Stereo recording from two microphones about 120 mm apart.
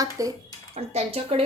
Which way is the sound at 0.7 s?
55° right (ahead or behind).